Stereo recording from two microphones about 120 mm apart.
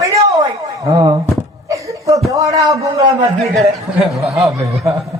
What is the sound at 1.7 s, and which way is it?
Chuckle, 25° right (ahead or behind).